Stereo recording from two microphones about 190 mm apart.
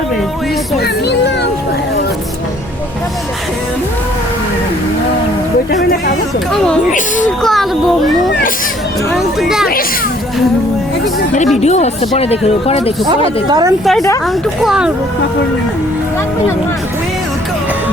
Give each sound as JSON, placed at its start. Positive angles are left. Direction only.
{"t": 0.8, "sound": "a sound", "side_deg": 60}
{"t": 7.4, "sound": "speech", "side_deg": 0}
{"t": 9.1, "sound": "speech", "side_deg": 0}
{"t": 11.6, "sound": "speech", "side_deg": 35}
{"t": 13.5, "sound": "a woman's voice", "side_deg": -20}
{"t": 14.6, "sound": "speech", "side_deg": -5}